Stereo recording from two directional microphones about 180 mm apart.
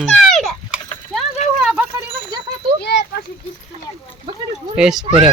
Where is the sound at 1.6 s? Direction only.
5° right (ahead or behind).